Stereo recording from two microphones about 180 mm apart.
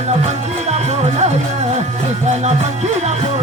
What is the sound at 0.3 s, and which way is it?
Music, 40° right (ahead or behind).